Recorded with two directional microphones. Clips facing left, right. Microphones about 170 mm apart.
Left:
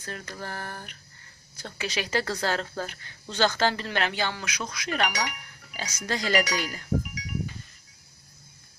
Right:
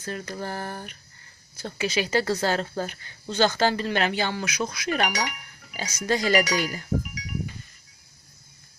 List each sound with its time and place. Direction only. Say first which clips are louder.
0.0 s speech: right 5 dB; 15° right (ahead or behind)
1.6 s speech: right 5 dB; 5° right (ahead or behind)